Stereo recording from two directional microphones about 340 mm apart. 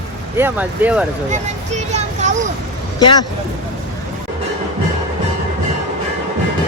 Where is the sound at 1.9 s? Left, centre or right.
Centre.